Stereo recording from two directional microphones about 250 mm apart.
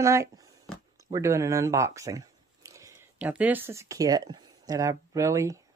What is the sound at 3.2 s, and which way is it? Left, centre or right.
Speech, centre.